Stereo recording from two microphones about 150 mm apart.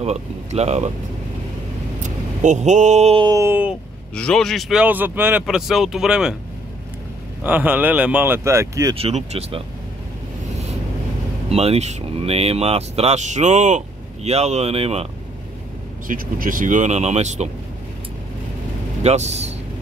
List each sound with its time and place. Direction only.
0.0 s speech: 45° right (ahead or behind)
2.0 s speech: 55° right (ahead or behind)
3.2 s a sound: 25° right (ahead or behind)
3.4 s speech: 10° right (ahead or behind)
4.1 s a man's voice: 5° left (ahead or behind)
4.8 s a man's voice: 10° right (ahead or behind)
7.4 s speech: 10° right (ahead or behind)
8.9 s speech: 45° right (ahead or behind)
11.4 s speech: 40° right (ahead or behind)
16.1 s speech: 65° right (ahead or behind)
19.0 s speech: 45° right (ahead or behind)